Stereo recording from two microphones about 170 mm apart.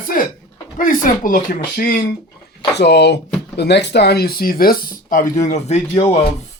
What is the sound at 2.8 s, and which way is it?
Speech, 85° left.